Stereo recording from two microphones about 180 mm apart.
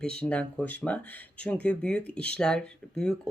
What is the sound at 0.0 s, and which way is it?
Speech, 5° left (ahead or behind).